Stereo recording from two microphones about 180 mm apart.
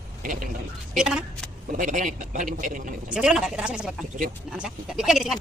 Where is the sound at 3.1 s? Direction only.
5° right (ahead or behind).